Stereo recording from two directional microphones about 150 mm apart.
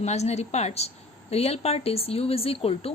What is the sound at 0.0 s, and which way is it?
Speech, 50° left (ahead or behind).